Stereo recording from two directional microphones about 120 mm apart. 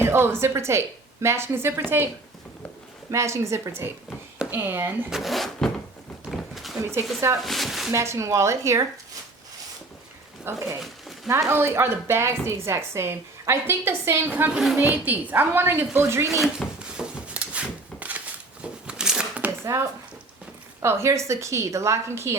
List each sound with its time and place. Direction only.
0.0 s a woman's voice: 20° right (ahead or behind)
3.1 s a woman's voice: 25° right (ahead or behind)
5.1 s speech: centre (ahead or behind)
6.2 s a sound: centre (ahead or behind)
7.4 s speech: centre (ahead or behind)
7.9 s a woman's voice: 25° right (ahead or behind)
10.5 s a woman's voice: 20° right (ahead or behind)
16.4 s a sound: 5° right (ahead or behind)
19.6 s a woman's voice: 25° right (ahead or behind)